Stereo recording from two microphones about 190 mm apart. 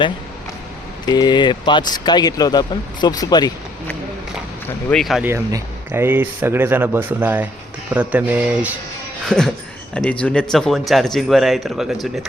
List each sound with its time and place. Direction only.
1.0 s speech: 20° left (ahead or behind)
4.9 s speech: centre (ahead or behind)
5.2 s speech: 15° right (ahead or behind)
9.9 s speech: 5° left (ahead or behind)